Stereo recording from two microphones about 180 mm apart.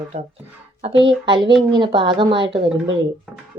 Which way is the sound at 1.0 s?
30° right (ahead or behind).